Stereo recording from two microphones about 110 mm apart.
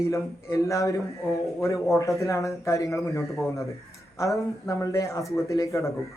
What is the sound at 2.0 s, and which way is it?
Speech, 30° left (ahead or behind).